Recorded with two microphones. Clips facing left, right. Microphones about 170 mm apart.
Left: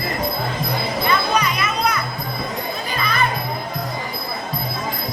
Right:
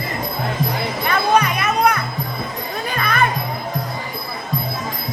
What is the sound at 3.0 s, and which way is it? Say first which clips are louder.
Music: right 2 dB; 55° right (ahead or behind).